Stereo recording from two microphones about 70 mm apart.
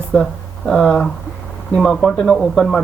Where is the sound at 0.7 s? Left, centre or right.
Centre.